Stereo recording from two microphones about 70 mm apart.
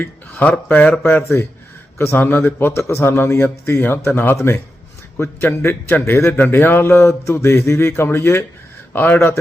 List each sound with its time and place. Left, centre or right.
0.0 s speech: left
8.9 s a man's voice: left
9.1 s speech: left